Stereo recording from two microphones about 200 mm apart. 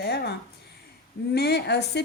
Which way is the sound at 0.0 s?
50° left (ahead or behind).